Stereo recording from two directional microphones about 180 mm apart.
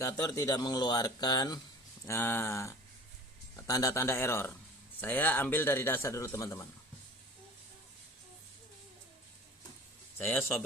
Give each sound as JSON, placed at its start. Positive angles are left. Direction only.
{"t": 0.0, "sound": "speech", "side_deg": 20}
{"t": 2.0, "sound": "a man's voice", "side_deg": 10}
{"t": 10.2, "sound": "a man's voice", "side_deg": 0}